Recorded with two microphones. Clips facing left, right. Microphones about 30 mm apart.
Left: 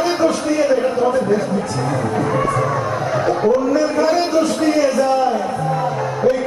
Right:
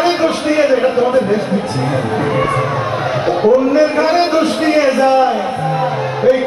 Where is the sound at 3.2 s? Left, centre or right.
Right.